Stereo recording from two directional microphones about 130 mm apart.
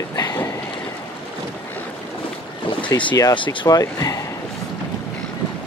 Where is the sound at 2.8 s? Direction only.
35° left (ahead or behind).